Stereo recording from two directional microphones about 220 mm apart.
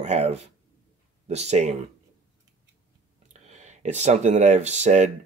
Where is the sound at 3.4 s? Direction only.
30° right (ahead or behind).